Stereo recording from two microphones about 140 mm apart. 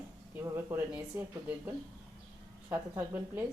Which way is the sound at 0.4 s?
15° right (ahead or behind).